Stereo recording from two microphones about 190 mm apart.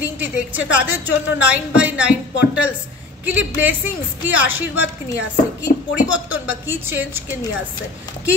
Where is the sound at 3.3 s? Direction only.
10° right (ahead or behind).